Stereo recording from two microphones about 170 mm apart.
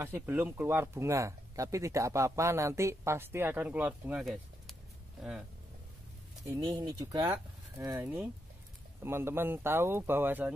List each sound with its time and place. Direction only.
0.0 s speech: 15° right (ahead or behind)
6.4 s speech: 20° right (ahead or behind)